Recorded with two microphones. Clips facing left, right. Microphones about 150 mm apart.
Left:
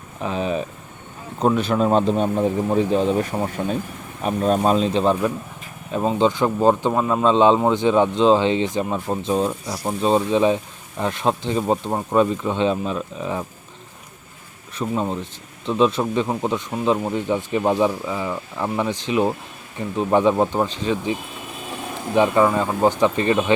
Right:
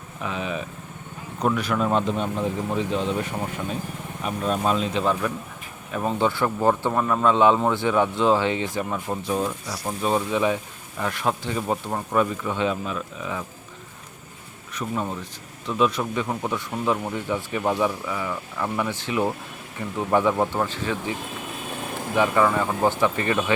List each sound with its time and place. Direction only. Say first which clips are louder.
0.2 s speech: left 6 dB; 35° left (ahead or behind)
5.9 s speech: left 5 dB; 20° left (ahead or behind)
14.8 s speech: left 5 dB; 25° left (ahead or behind)